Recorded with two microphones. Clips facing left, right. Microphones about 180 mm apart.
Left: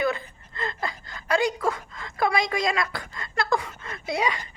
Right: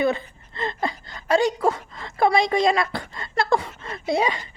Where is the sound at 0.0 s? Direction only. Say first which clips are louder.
Right 4 dB; 25° right (ahead or behind).